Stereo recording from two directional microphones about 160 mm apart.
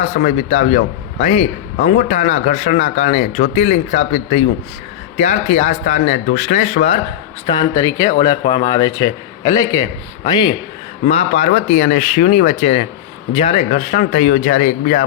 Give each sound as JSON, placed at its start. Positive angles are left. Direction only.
{"t": 0.2, "sound": "speech", "side_deg": 55}
{"t": 1.2, "sound": "a man's voice", "side_deg": 40}
{"t": 7.4, "sound": "a man's voice", "side_deg": 25}
{"t": 11.1, "sound": "a man's voice", "side_deg": 45}
{"t": 13.9, "sound": "speech", "side_deg": 50}